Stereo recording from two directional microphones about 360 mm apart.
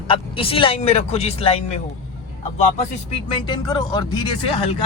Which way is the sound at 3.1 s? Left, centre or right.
Centre.